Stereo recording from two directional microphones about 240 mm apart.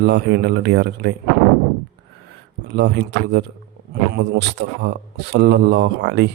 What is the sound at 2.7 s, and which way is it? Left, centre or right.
A man's voice, right.